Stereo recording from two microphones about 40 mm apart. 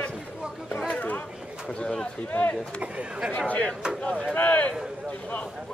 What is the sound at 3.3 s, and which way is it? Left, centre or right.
Chop, left.